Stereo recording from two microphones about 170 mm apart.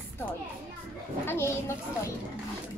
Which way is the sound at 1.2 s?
15° left (ahead or behind).